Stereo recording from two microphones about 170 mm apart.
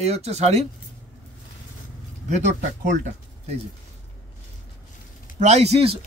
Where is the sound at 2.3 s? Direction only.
45° right (ahead or behind).